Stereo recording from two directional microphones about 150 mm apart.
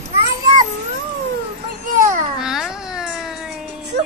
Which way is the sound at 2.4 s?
5° right (ahead or behind).